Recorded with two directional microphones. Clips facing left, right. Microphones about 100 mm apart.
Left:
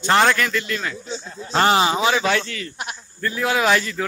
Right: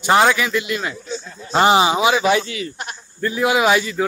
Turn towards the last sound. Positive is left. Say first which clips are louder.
# right 3 dB
turn(degrees=-10)  # may be behind; listen again after turning